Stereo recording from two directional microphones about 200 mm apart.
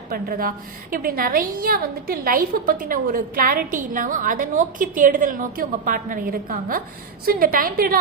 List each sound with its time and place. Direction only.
0.1 s a woman's voice: 45° right (ahead or behind)